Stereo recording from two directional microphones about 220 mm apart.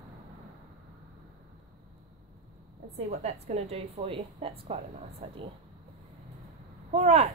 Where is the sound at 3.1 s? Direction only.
30° right (ahead or behind).